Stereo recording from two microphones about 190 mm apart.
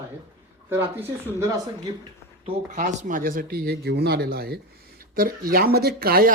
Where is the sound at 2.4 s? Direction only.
40° right (ahead or behind).